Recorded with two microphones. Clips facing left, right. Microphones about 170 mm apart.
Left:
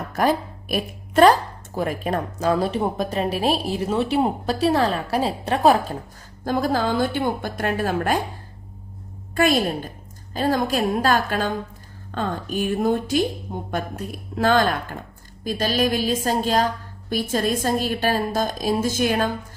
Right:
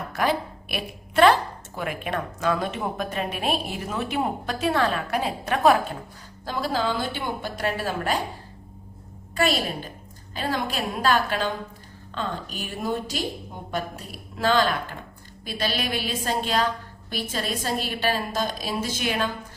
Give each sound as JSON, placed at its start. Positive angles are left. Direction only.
{"t": 0.1, "sound": "speech", "side_deg": 45}
{"t": 6.4, "sound": "a woman's voice", "side_deg": 50}
{"t": 9.3, "sound": "a woman's voice", "side_deg": 50}